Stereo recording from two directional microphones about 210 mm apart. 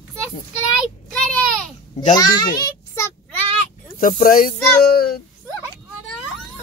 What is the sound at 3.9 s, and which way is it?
Speech, 40° left (ahead or behind).